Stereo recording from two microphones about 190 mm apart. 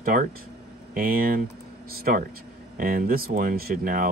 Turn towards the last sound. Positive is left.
turn(degrees=-50)  # may be behind; listen again after turning